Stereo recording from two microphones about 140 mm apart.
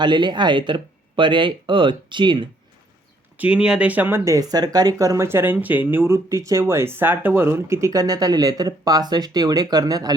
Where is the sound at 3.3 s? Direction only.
10° right (ahead or behind).